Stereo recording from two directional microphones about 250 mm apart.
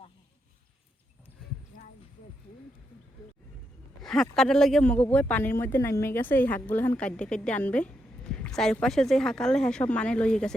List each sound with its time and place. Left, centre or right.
4.0 s speech: centre